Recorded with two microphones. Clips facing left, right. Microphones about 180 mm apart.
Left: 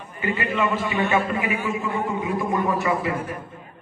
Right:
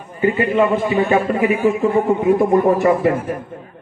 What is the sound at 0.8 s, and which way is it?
A man's voice, 40° right (ahead or behind).